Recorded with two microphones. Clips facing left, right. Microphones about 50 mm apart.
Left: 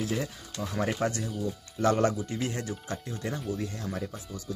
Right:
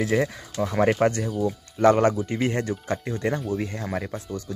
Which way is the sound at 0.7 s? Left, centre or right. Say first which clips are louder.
Right 9 dB; right.